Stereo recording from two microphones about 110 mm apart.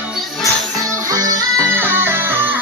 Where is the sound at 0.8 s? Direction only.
30° right (ahead or behind).